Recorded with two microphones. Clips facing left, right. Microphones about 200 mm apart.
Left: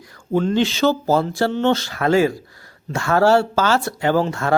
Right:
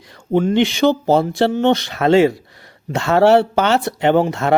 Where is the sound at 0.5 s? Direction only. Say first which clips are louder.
Right 3 dB; 15° right (ahead or behind).